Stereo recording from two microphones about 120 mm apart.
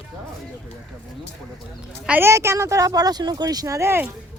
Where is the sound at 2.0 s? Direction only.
15° right (ahead or behind).